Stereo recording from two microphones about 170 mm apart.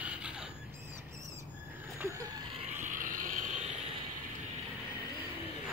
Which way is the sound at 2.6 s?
50° right (ahead or behind).